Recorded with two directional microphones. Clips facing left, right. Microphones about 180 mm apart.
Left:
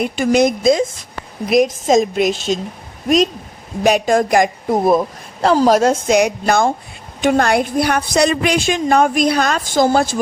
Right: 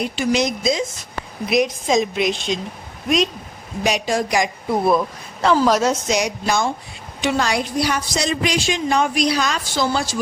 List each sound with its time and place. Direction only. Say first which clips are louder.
0.0 s a woman's voice: left 6 dB; 50° left (ahead or behind)
3.8 s a woman's voice: left 7 dB; 50° left (ahead or behind)